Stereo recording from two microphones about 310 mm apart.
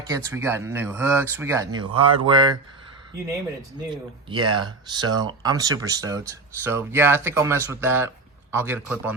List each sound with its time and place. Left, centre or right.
0.3 s speech: centre
4.4 s speech: centre